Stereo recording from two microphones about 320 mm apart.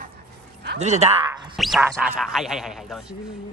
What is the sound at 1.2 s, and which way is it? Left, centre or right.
Speech, centre.